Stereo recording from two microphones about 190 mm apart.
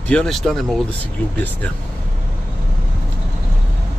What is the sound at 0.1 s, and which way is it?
Speech, centre (ahead or behind).